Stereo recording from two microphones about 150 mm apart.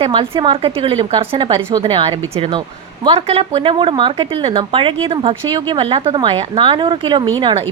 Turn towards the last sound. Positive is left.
turn(degrees=-30)  # may be behind; listen again after turning